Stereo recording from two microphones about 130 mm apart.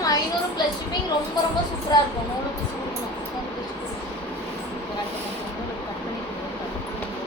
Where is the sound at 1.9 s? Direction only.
30° left (ahead or behind).